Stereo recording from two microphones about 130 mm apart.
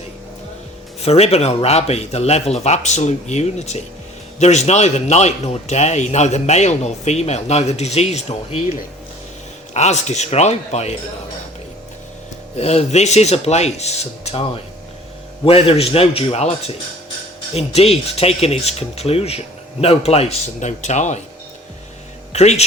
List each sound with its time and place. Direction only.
1.0 s a man's voice: 55° left (ahead or behind)
12.5 s a man's voice: 50° left (ahead or behind)
15.4 s speech: 50° left (ahead or behind); by 21.2 s 65° left (ahead or behind)
22.3 s speech: 55° left (ahead or behind)